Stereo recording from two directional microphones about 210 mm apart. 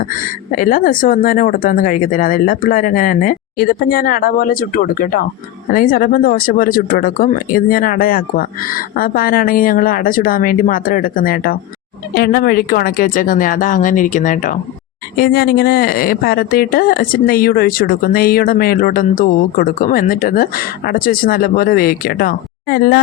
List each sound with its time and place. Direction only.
0.0 s a woman's voice: 40° left (ahead or behind)